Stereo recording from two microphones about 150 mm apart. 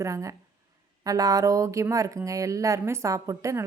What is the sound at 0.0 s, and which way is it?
Speech, 20° right (ahead or behind).